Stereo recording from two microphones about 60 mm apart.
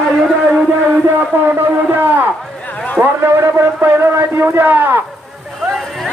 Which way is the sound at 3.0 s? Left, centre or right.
Right.